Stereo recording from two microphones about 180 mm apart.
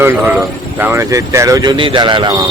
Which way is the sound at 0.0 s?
10° right (ahead or behind).